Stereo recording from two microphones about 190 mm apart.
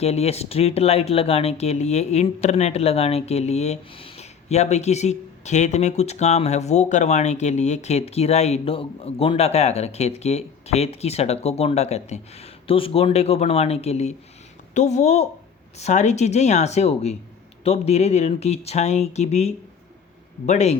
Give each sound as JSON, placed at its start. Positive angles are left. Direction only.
{"t": 0.0, "sound": "speech", "side_deg": 35}